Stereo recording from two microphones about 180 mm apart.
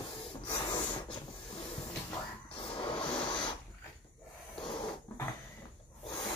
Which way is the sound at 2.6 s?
30° left (ahead or behind).